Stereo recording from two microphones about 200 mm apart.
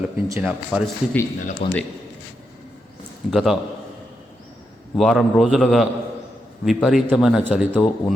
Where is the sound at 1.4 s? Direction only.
40° left (ahead or behind).